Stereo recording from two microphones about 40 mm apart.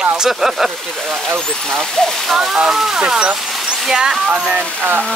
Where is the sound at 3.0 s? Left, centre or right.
Right.